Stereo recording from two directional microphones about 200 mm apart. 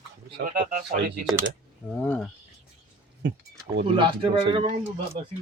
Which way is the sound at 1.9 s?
10° left (ahead or behind).